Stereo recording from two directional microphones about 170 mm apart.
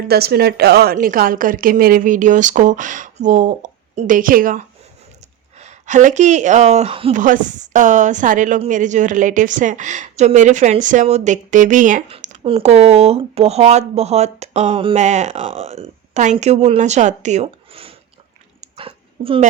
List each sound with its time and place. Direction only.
0.1 s a woman's voice: 70° right (ahead or behind)
5.5 s a woman's voice: 45° right (ahead or behind)
7.2 s a woman's voice: 50° right (ahead or behind)
12.0 s speech: 40° right (ahead or behind)
14.9 s speech: 45° right (ahead or behind)
18.6 s dog: 30° right (ahead or behind)